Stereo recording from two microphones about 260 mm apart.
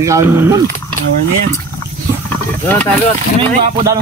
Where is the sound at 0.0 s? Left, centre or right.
Centre.